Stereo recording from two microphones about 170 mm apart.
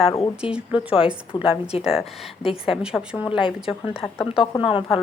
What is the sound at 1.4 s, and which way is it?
Speech, 35° left (ahead or behind).